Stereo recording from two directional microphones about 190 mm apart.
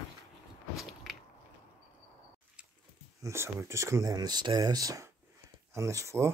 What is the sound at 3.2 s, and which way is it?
Speech, 15° right (ahead or behind).